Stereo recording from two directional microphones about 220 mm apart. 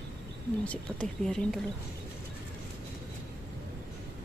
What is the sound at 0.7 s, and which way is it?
Speech, 5° left (ahead or behind).